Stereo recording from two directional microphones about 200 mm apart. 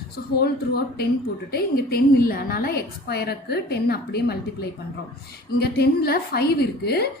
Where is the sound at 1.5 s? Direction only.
50° left (ahead or behind).